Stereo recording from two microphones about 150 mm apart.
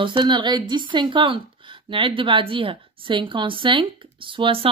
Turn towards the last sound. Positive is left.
turn(degrees=-35)  # may be behind; listen again after turning